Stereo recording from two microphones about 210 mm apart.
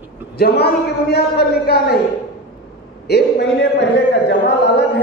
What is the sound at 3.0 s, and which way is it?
A man's voice, 50° left (ahead or behind).